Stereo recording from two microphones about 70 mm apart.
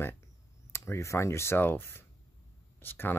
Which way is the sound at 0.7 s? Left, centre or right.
Left.